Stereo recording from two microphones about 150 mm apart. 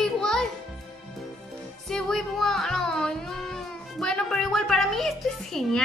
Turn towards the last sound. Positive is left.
turn(degrees=0)  # may be behind; listen again after turning